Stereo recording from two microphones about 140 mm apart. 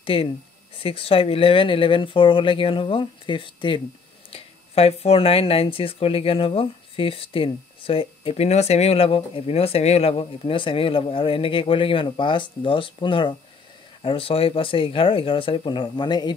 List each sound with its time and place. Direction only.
0.0 s speech: 40° left (ahead or behind)